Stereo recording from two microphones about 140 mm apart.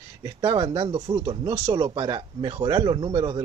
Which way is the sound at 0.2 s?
30° right (ahead or behind).